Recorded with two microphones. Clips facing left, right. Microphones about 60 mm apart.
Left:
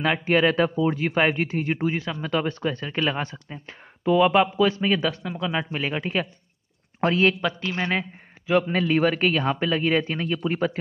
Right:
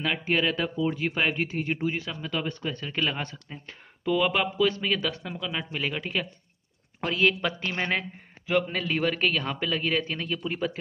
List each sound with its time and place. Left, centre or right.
0.0 s speech: left
2.7 s a man's voice: left
7.4 s speech: centre
8.5 s a man's voice: centre; by 10.8 s left